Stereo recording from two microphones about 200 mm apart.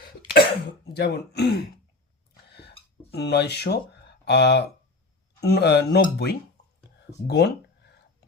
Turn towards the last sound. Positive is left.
turn(degrees=55)  # may be behind; listen again after turning